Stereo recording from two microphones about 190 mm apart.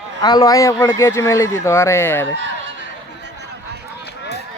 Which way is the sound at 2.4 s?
75° right (ahead or behind).